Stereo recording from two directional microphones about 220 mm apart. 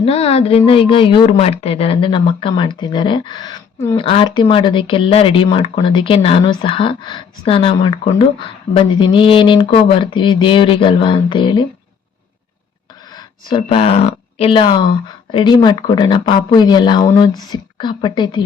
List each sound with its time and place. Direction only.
0.0 s speech: 25° left (ahead or behind)
13.1 s a sound: 25° left (ahead or behind)
14.3 s speech: 25° left (ahead or behind)